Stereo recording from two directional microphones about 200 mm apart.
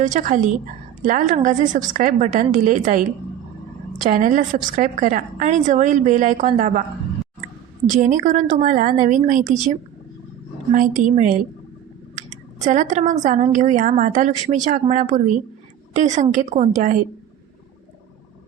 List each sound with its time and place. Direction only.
0.0 s a woman's voice: 40° right (ahead or behind)
7.9 s a woman's voice: 35° right (ahead or behind)
10.7 s a woman's voice: 40° right (ahead or behind)
12.6 s a woman's voice: 40° right (ahead or behind)